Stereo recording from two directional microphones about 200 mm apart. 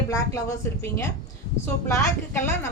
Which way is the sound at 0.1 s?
15° left (ahead or behind).